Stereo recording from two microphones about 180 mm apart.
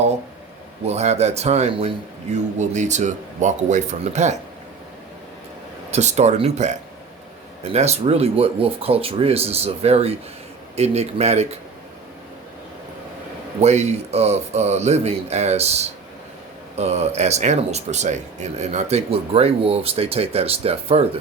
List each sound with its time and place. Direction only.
0.9 s speech: 35° right (ahead or behind)
5.9 s speech: 40° right (ahead or behind)
13.6 s speech: 35° right (ahead or behind)